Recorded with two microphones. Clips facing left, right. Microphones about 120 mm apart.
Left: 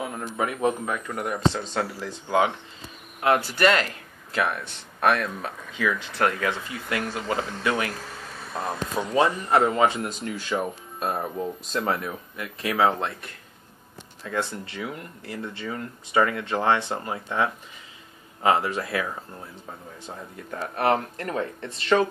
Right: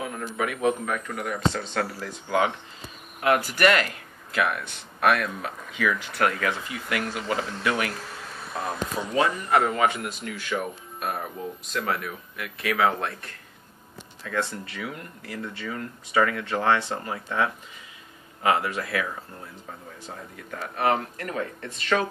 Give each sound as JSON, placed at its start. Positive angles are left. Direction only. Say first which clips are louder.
{"t": 0.0, "sound": "a man's voice", "louder": "left 1 dB", "side_deg": 25}
{"t": 14.2, "sound": "speech", "louder": "even", "side_deg": 20}
{"t": 20.5, "sound": "speech", "louder": "left 1 dB", "side_deg": 40}